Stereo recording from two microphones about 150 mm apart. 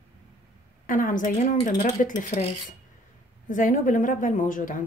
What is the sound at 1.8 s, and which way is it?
Speech, 60° left (ahead or behind).